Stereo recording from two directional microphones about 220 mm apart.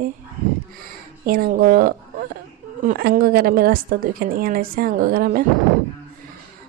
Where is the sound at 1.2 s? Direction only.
40° right (ahead or behind).